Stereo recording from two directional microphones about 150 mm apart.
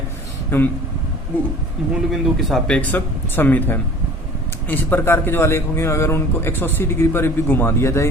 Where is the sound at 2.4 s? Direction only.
5° left (ahead or behind).